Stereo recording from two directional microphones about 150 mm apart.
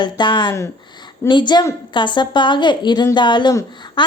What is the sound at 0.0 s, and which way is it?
A woman's voice, 30° left (ahead or behind).